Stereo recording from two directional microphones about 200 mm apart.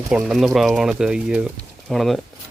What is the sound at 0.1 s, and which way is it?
Speech, 5° right (ahead or behind).